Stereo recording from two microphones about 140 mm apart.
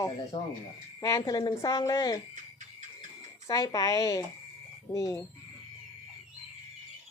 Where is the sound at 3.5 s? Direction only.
25° left (ahead or behind).